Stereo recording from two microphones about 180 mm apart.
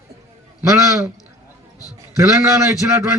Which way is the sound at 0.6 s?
15° right (ahead or behind).